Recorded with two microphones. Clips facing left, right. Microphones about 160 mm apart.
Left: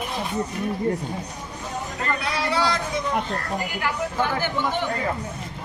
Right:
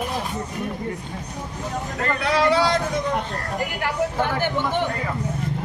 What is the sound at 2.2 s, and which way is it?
Speech, 55° right (ahead or behind).